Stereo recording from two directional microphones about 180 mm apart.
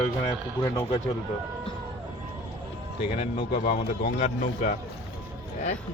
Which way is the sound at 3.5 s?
50° left (ahead or behind).